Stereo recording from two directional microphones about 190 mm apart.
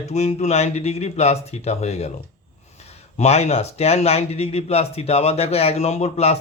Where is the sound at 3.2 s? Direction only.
35° left (ahead or behind).